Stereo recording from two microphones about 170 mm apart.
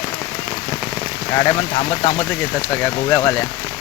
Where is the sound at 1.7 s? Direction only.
35° left (ahead or behind).